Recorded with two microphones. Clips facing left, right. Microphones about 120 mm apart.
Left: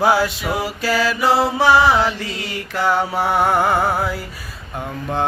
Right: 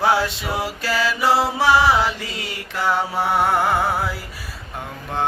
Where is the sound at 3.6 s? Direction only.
Centre (ahead or behind).